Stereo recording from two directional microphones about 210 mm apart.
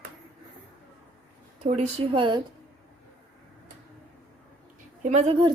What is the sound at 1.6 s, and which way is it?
Speech, 30° right (ahead or behind).